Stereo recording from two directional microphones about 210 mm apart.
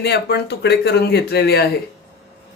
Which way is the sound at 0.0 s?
50° left (ahead or behind).